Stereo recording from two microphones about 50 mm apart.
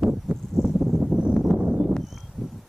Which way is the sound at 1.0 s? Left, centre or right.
Right.